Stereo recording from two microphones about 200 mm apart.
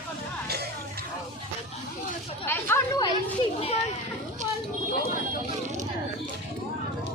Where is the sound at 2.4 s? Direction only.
10° left (ahead or behind).